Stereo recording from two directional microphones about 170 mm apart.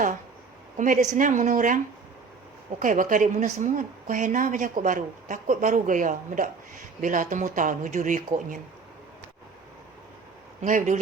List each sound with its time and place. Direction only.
0.8 s a woman's voice: 45° right (ahead or behind)
10.6 s a woman's voice: 45° right (ahead or behind)